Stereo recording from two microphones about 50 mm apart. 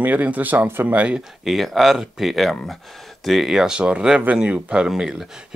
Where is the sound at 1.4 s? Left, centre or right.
Centre.